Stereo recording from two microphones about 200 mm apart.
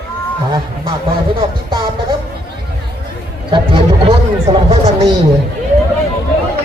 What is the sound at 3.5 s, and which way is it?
Speech, 25° right (ahead or behind).